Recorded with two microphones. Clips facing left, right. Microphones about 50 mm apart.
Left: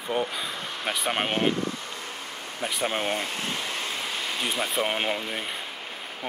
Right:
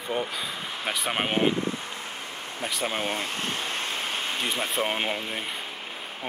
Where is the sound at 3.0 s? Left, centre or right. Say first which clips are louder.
Left 1 dB; left.